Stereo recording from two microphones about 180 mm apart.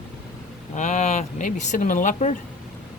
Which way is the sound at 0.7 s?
40° left (ahead or behind).